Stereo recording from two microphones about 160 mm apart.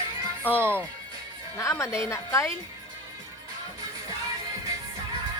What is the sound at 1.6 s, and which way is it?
Speech, 20° left (ahead or behind).